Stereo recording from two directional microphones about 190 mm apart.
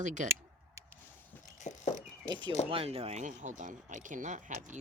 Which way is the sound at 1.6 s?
35° left (ahead or behind).